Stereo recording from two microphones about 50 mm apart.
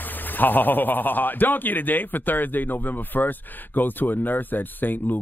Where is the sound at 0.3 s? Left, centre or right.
Left.